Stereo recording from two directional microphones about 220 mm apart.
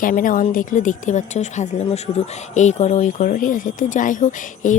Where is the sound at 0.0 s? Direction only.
40° left (ahead or behind).